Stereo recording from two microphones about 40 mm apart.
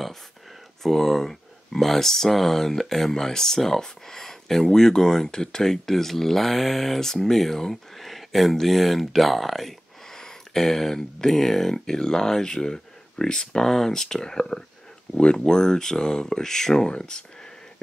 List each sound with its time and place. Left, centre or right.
0.8 s speech: centre
10.1 s a sound: centre
11.1 s speech: centre